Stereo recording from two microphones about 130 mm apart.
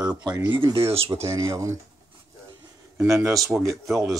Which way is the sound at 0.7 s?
50° right (ahead or behind).